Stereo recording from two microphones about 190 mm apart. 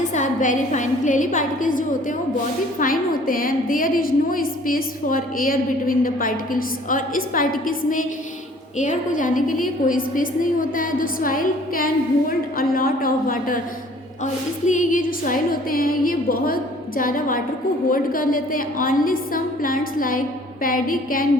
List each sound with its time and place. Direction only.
0.0 s a woman's voice: 40° left (ahead or behind)
14.7 s a woman's voice: 45° left (ahead or behind)